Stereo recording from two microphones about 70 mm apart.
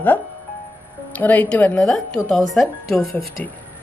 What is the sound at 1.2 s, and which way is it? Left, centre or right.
Speech, left.